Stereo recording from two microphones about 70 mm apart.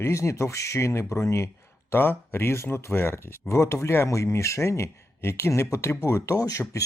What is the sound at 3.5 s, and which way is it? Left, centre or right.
Speech, left.